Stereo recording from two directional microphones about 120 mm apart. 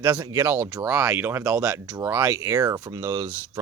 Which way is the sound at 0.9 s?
10° right (ahead or behind).